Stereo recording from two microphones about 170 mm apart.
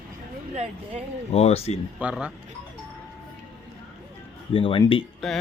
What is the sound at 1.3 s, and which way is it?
Speech, 35° left (ahead or behind).